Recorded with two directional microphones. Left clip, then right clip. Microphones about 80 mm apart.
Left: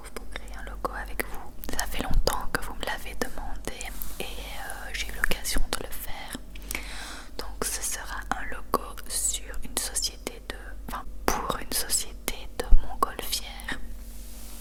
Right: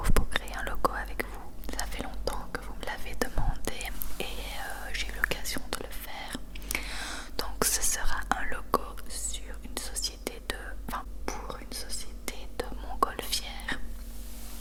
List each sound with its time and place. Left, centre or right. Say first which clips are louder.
0.3 s whispering: right 8 dB; right
0.9 s whispering: left 1 dB; centre
2.0 s whispering: left 7 dB; left
3.0 s whispering: even; centre
10.4 s whispering: right 2 dB; centre
11.3 s whispering: left 12 dB; left
12.2 s whispering: left 3 dB; centre